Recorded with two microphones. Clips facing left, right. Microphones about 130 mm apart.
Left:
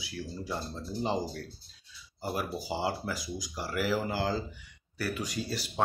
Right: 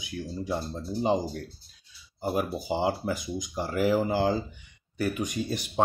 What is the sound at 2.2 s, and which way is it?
Speech, 20° right (ahead or behind).